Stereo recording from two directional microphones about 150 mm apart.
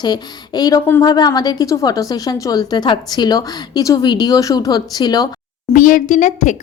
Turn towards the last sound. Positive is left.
turn(degrees=60)  # may be behind; listen again after turning